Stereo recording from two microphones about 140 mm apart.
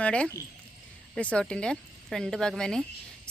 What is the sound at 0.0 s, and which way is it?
Speech, 5° left (ahead or behind).